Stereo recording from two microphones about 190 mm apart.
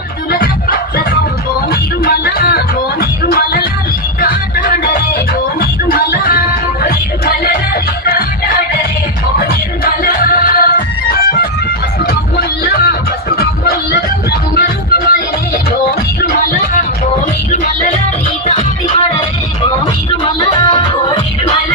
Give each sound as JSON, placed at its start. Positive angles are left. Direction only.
{"t": 0.3, "sound": "music", "side_deg": 50}
{"t": 9.4, "sound": "music", "side_deg": 50}
{"t": 12.1, "sound": "music", "side_deg": 55}
{"t": 14.5, "sound": "music", "side_deg": 55}
{"t": 18.5, "sound": "music", "side_deg": 30}
{"t": 20.3, "sound": "music", "side_deg": 25}